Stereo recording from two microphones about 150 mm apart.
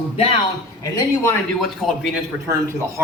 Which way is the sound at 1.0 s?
15° left (ahead or behind).